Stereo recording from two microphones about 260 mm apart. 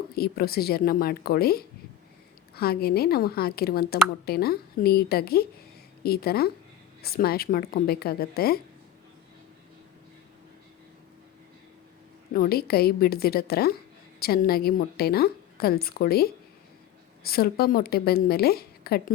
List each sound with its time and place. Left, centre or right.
0.1 s a woman's voice: left
12.3 s a woman's voice: left